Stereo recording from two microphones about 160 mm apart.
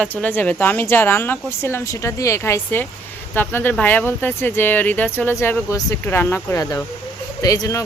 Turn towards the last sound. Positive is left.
turn(degrees=20)  # may be behind; listen again after turning